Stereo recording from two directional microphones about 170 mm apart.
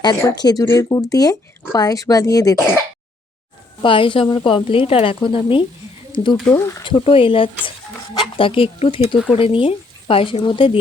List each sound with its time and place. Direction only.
0.0 s speech: 20° left (ahead or behind)
3.8 s a woman's voice: 30° left (ahead or behind)
6.3 s speech: 5° left (ahead or behind)
6.6 s speech: 15° left (ahead or behind)
6.8 s a woman's voice: 30° left (ahead or behind)